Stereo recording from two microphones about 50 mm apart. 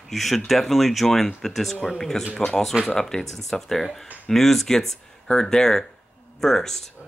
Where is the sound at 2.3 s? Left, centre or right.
Centre.